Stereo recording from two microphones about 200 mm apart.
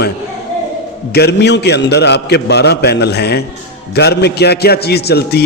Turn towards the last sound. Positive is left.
turn(degrees=55)  # may be behind; listen again after turning